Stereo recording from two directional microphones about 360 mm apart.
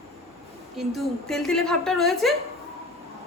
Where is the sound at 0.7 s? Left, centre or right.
Centre.